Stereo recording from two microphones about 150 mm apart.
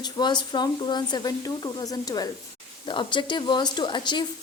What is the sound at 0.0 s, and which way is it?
A woman's voice, 30° left (ahead or behind).